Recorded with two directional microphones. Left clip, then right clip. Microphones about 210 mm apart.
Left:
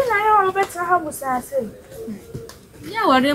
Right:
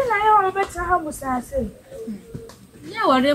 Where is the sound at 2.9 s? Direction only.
10° left (ahead or behind).